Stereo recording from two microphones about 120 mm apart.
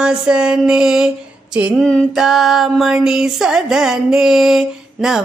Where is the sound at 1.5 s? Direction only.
5° right (ahead or behind).